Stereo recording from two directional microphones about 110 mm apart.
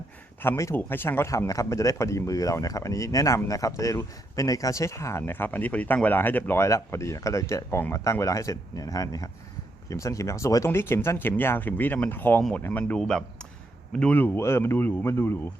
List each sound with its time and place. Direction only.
0.4 s speech: 25° left (ahead or behind)
12.4 s speech: 5° left (ahead or behind); by 15.4 s 20° left (ahead or behind)